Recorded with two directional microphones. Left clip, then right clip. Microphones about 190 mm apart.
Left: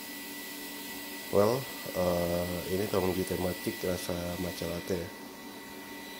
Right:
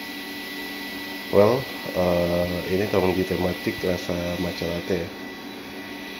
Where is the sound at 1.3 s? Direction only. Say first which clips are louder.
Right 9 dB; 10° left (ahead or behind).